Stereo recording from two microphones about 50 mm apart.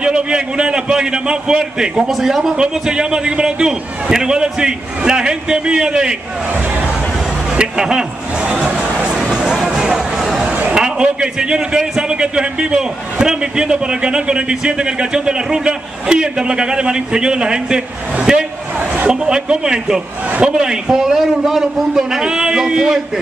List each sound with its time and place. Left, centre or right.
0.0 s a man's voice: centre
7.5 s a man's voice: centre
9.4 s music: centre
10.7 s a man's voice: centre
18.8 s a sound: right
19.2 s a man's voice: centre
20.2 s speech: right
20.5 s a man's voice: centre